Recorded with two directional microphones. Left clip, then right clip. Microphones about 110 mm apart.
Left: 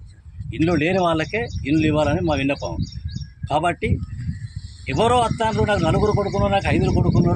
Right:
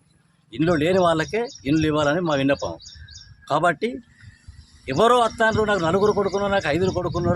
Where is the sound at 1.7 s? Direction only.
40° right (ahead or behind).